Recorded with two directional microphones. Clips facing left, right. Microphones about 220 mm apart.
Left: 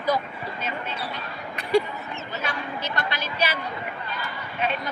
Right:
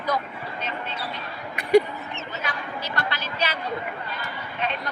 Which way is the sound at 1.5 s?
15° right (ahead or behind).